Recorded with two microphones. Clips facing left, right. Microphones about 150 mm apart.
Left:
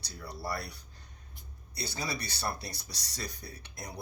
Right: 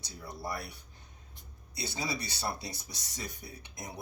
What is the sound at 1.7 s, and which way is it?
Speech, 20° right (ahead or behind).